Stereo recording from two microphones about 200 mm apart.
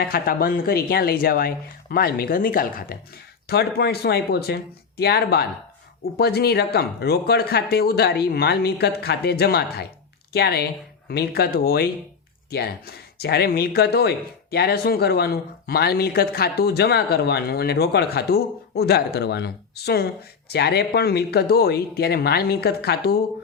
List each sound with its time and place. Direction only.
0.0 s speech: 50° left (ahead or behind)